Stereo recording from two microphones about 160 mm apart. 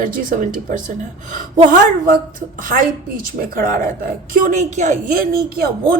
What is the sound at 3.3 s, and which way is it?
A woman's voice, 65° right (ahead or behind).